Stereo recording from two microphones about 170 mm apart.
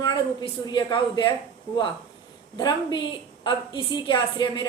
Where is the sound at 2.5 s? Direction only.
25° left (ahead or behind).